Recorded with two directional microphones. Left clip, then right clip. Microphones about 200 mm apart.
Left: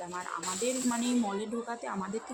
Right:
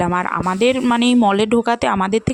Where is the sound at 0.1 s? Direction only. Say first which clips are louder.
Right 17 dB; 55° right (ahead or behind).